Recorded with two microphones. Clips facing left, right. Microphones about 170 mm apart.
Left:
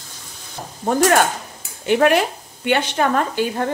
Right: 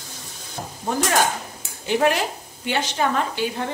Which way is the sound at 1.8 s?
60° left (ahead or behind).